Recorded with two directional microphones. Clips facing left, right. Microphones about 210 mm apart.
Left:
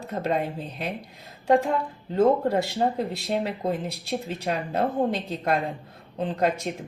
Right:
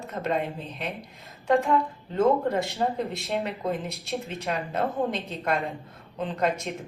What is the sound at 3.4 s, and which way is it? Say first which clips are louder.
Speech: left 1 dB; 30° left (ahead or behind).